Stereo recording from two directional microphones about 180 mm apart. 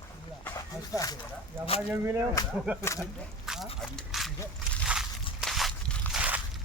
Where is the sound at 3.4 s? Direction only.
5° right (ahead or behind).